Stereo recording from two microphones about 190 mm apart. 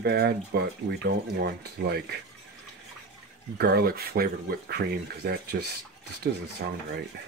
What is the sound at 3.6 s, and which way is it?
Speech, 55° right (ahead or behind).